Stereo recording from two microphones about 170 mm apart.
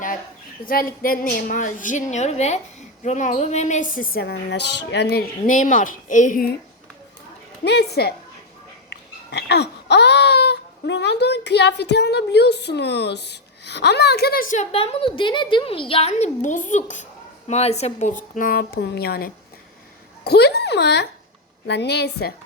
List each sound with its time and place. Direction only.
0.6 s a woman's voice: 60° left (ahead or behind)
7.6 s a woman's voice: 75° left (ahead or behind)
9.3 s a woman's voice: 80° left